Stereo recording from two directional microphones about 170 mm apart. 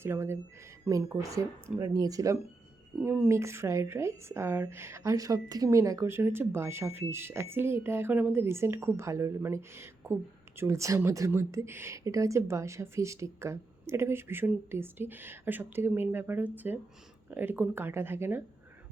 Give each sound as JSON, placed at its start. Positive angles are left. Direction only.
{"t": 0.0, "sound": "speech", "side_deg": -15}